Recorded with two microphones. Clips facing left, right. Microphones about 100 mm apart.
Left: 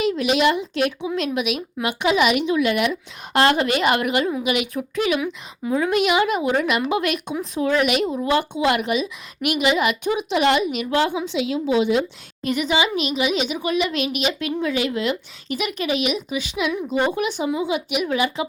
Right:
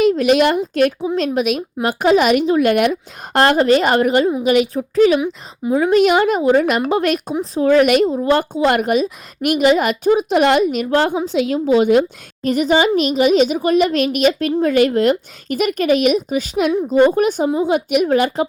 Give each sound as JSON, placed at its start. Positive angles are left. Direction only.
{"t": 0.0, "sound": "a woman's voice", "side_deg": -45}